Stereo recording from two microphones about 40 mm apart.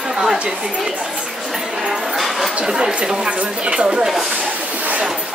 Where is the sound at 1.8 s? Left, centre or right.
Centre.